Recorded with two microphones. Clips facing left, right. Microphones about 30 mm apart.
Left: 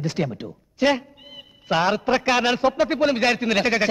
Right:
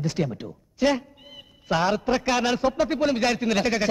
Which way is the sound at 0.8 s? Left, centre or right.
Left.